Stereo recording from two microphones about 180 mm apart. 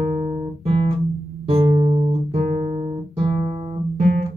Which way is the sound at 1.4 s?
35° right (ahead or behind).